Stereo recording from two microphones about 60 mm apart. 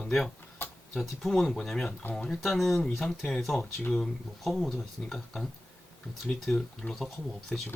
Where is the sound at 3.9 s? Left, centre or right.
Centre.